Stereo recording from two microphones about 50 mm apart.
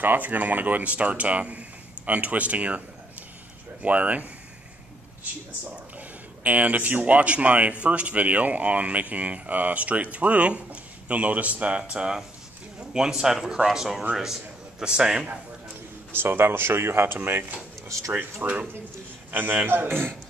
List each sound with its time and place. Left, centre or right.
0.0 s speech: right
5.9 s a man's voice: right; by 15.2 s centre
16.1 s speech: right
17.8 s speech: right
18.4 s a man's voice: right